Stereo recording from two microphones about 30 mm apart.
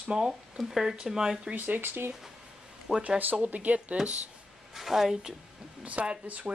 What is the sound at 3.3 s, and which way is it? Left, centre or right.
Speech, right.